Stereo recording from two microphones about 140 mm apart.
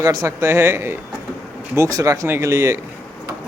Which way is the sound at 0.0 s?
25° right (ahead or behind).